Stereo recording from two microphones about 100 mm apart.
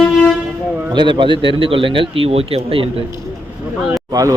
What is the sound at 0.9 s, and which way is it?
A man's voice, 50° right (ahead or behind).